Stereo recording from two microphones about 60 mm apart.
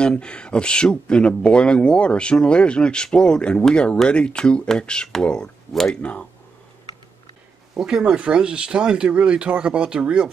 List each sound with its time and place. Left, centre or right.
0.0 s speech: centre
7.8 s speech: centre